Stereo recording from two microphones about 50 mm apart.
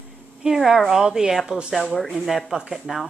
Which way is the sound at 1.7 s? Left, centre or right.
Centre.